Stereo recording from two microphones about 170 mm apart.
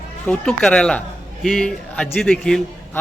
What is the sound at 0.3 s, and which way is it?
A man's voice, 5° left (ahead or behind).